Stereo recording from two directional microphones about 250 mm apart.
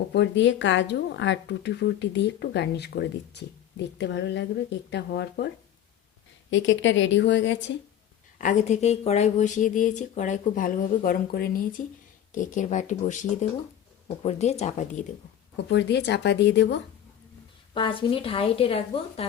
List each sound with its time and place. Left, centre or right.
0.1 s speech: left
6.5 s speech: left
8.4 s speech: left
15.7 s speech: left
17.7 s speech: centre